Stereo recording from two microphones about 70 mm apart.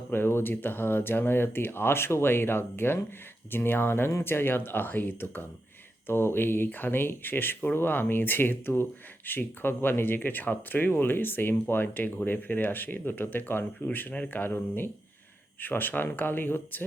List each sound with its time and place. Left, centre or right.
0.1 s speech: left